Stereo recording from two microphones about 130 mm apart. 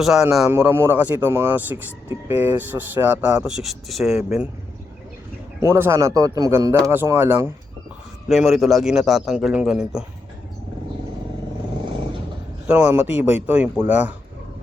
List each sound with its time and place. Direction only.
0.0 s a man's voice: 5° right (ahead or behind)
0.5 s speech: 15° right (ahead or behind); by 4.2 s centre (ahead or behind)
5.6 s speech: 20° right (ahead or behind)
8.3 s a man's voice: centre (ahead or behind)
12.6 s speech: 10° right (ahead or behind)